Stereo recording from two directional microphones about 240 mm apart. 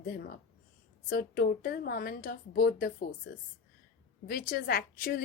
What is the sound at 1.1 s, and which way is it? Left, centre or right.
A woman's voice, left.